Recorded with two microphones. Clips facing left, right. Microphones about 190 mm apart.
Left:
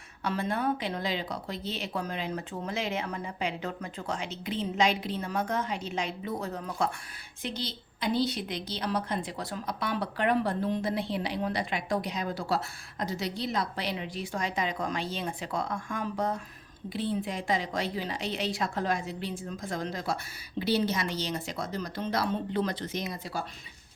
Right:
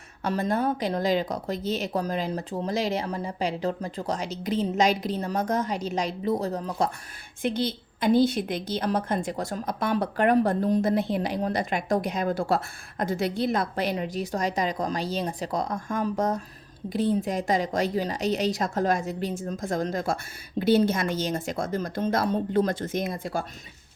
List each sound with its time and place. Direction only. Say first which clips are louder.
0.3 s speech: right 4 dB; 40° right (ahead or behind)
7.4 s a woman's voice: right 9 dB; 55° right (ahead or behind)